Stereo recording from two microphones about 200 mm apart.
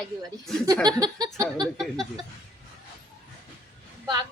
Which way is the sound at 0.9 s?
20° right (ahead or behind).